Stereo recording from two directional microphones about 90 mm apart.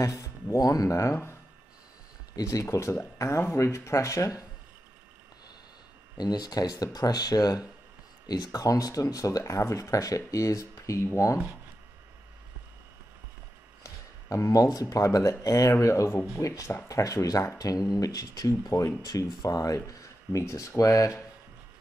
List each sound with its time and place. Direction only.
0.0 s speech: 35° left (ahead or behind)
2.3 s speech: 35° left (ahead or behind)
6.1 s speech: 50° left (ahead or behind)
13.8 s speech: 35° left (ahead or behind)